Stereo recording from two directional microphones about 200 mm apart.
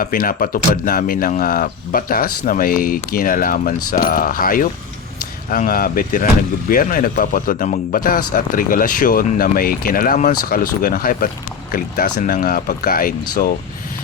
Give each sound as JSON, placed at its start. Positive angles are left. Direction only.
{"t": 0.0, "sound": "speech", "side_deg": 45}